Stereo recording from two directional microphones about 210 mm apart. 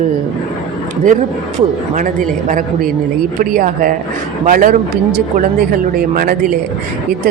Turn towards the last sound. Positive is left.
turn(degrees=-45)  # may be behind; listen again after turning